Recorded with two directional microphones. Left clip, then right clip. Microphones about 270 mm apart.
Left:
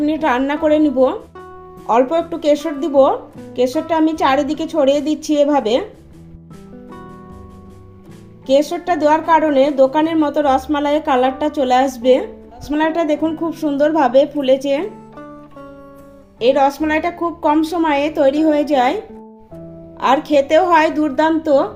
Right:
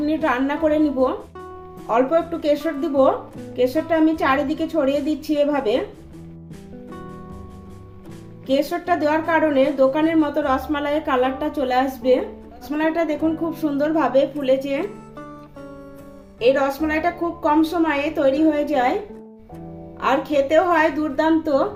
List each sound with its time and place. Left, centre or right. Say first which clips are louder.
0.0 s a woman's voice: left 4 dB; left
1.9 s a woman's voice: left 4 dB; left
8.4 s a woman's voice: left 5 dB; left
16.4 s a woman's voice: left 4 dB; left
20.0 s a woman's voice: left 5 dB; left